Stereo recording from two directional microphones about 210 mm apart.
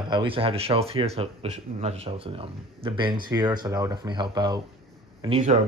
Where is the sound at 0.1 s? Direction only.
25° right (ahead or behind).